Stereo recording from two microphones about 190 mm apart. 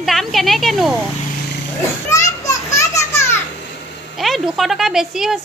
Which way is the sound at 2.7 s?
15° left (ahead or behind).